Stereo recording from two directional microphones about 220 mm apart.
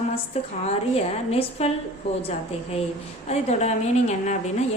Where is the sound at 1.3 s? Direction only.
25° left (ahead or behind).